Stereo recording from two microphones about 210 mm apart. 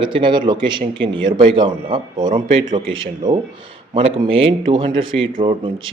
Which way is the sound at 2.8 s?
65° right (ahead or behind).